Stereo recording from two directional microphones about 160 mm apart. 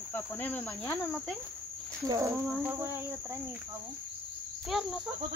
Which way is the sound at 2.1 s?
20° right (ahead or behind).